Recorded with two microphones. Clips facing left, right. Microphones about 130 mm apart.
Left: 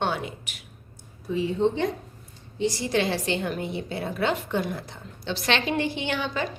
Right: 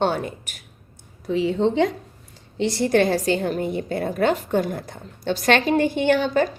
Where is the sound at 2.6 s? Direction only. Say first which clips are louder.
Right 6 dB; 65° right (ahead or behind).